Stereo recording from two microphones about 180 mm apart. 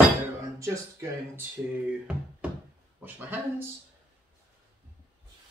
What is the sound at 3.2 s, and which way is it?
Speech, 10° right (ahead or behind).